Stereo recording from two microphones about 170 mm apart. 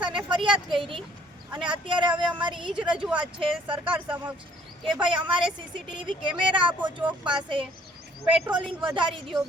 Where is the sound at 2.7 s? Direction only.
5° right (ahead or behind).